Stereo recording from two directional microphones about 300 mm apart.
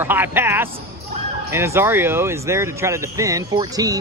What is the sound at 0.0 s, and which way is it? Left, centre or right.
Speech, centre.